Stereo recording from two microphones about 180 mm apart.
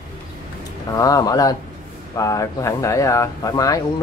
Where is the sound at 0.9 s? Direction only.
20° left (ahead or behind).